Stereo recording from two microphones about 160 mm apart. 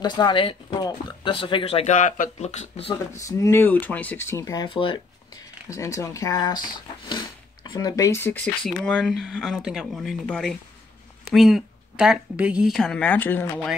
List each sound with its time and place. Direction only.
0.0 s speech: 25° left (ahead or behind); by 2.9 s 45° left (ahead or behind)
3.1 s speech: 20° left (ahead or behind)
4.6 s a woman's voice: 30° left (ahead or behind); by 13.7 s 10° left (ahead or behind)